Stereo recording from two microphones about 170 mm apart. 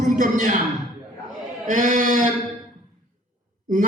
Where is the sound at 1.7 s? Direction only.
50° right (ahead or behind).